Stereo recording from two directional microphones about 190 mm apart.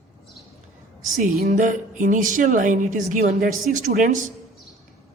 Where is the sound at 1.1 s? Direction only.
45° right (ahead or behind).